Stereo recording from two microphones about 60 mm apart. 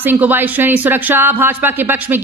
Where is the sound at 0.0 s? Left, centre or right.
Right.